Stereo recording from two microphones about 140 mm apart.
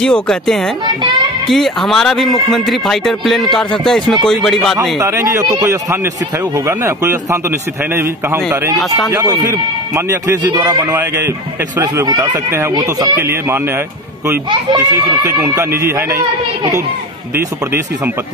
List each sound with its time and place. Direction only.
0.0 s speech: 5° left (ahead or behind)
5.0 s a man's voice: 20° right (ahead or behind)
14.7 s a man's voice: 25° right (ahead or behind)